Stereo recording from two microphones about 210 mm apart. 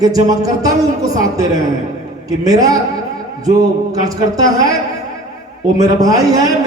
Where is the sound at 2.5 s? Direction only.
15° right (ahead or behind).